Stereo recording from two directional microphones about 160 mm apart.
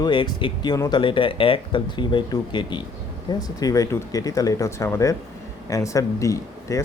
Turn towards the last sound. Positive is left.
turn(degrees=20)  # may be behind; listen again after turning